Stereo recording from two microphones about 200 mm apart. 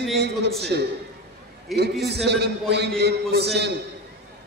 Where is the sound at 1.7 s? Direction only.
Centre (ahead or behind).